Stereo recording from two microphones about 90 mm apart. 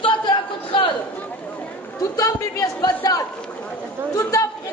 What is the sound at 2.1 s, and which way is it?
Chatter, 40° left (ahead or behind).